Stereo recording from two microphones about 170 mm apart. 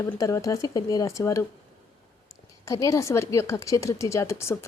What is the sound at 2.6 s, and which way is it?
Speech, 20° left (ahead or behind).